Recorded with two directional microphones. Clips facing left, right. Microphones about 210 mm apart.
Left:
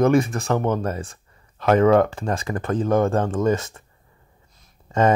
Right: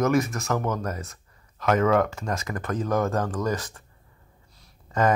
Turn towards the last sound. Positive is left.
turn(degrees=25)  # may be behind; listen again after turning